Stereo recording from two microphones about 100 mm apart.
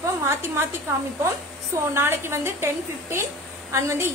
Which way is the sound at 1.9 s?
25° right (ahead or behind).